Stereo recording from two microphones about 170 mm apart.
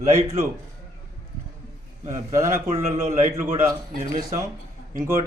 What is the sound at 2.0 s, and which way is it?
A man's voice, 15° right (ahead or behind).